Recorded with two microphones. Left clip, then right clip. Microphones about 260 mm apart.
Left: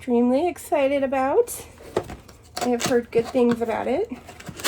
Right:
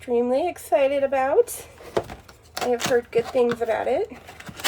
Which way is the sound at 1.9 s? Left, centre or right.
Centre.